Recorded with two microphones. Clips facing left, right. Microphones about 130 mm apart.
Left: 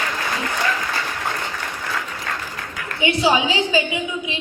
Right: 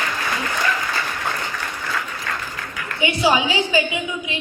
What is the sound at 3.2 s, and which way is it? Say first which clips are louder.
Speech: right 1 dB; 25° left (ahead or behind).